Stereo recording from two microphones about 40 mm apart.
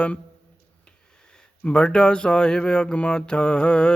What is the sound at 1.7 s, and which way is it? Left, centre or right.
Speech, left.